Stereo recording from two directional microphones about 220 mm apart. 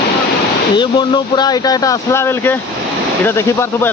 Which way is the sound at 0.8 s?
20° left (ahead or behind).